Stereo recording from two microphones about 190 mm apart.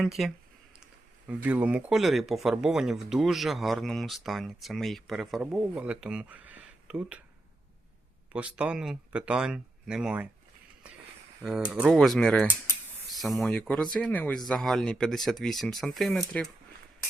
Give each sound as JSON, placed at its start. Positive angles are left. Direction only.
{"t": 0.0, "sound": "speech", "side_deg": 0}
{"t": 8.3, "sound": "speech", "side_deg": -5}
{"t": 11.4, "sound": "speech", "side_deg": 0}